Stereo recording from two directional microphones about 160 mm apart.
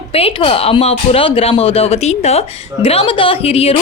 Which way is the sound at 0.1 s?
35° left (ahead or behind).